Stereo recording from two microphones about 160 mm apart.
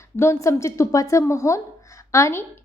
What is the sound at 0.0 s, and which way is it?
A woman's voice, 15° left (ahead or behind).